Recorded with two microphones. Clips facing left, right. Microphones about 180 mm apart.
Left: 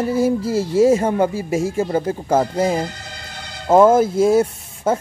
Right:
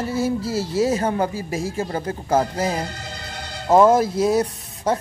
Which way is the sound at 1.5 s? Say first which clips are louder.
Left 6 dB; 10° left (ahead or behind).